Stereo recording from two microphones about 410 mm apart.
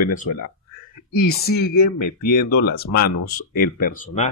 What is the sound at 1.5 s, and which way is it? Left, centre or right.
Speech, left.